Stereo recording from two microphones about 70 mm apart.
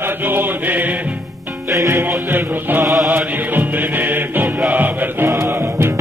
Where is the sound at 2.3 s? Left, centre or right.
Right.